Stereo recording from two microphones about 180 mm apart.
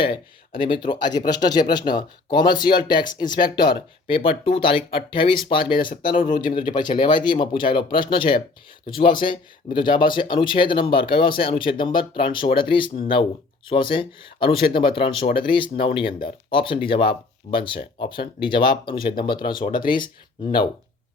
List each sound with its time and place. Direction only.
0.6 s speech: 25° left (ahead or behind)
6.1 s speech: 45° left (ahead or behind)
6.5 s speech: 25° left (ahead or behind)